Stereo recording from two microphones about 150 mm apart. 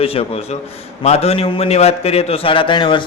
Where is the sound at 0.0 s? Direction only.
40° left (ahead or behind).